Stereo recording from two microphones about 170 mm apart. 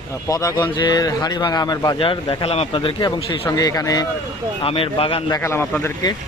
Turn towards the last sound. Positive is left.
turn(degrees=20)  # may be behind; listen again after turning